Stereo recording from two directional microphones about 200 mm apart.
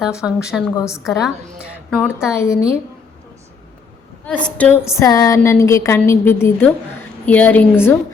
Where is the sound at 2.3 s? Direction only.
15° left (ahead or behind).